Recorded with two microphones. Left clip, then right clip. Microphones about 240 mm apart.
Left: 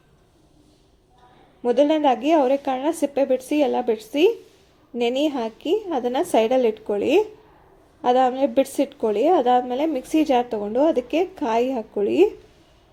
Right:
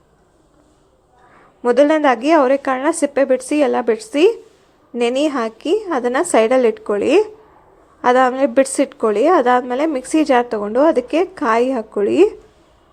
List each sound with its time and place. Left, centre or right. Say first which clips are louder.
1.6 s speech: right 5 dB; centre